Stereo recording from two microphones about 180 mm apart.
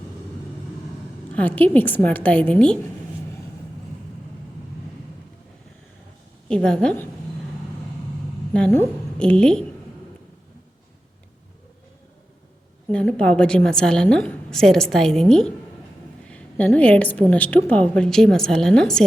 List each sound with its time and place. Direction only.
1.3 s a woman's voice: 10° left (ahead or behind)
6.5 s a woman's voice: 5° left (ahead or behind)
8.5 s a woman's voice: 5° left (ahead or behind)
12.9 s a woman's voice: 5° left (ahead or behind)